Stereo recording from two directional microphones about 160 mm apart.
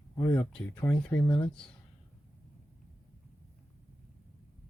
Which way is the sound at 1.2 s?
25° left (ahead or behind).